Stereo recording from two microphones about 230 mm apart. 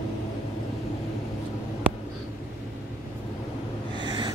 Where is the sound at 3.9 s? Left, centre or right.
Centre.